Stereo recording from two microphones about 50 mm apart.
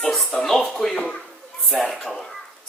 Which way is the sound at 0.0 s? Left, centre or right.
Centre.